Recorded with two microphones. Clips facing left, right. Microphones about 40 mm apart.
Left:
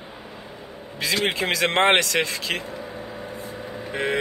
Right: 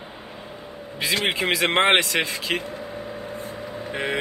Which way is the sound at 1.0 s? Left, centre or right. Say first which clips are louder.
Even; centre.